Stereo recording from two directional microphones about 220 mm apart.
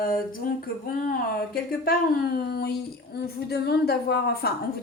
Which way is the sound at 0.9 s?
40° left (ahead or behind).